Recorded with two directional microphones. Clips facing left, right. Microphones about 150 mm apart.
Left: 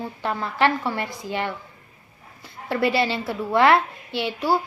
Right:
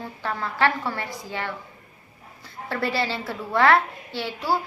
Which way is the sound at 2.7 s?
20° left (ahead or behind).